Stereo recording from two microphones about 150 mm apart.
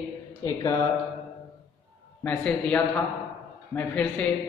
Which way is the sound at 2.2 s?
10° left (ahead or behind).